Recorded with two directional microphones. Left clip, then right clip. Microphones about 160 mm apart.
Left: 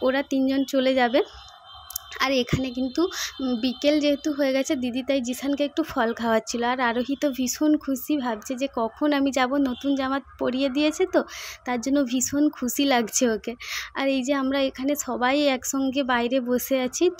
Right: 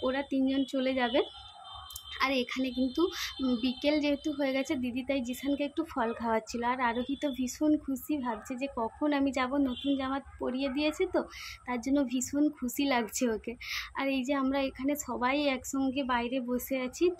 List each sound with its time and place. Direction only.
0.0 s a woman's voice: 40° left (ahead or behind)